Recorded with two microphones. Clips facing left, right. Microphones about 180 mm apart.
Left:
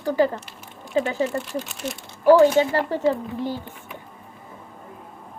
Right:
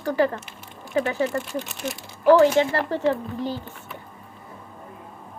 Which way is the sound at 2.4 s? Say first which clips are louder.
Left 1 dB; 15° left (ahead or behind).